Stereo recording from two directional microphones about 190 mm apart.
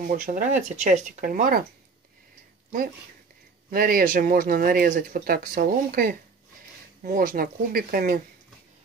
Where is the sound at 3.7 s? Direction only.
50° right (ahead or behind).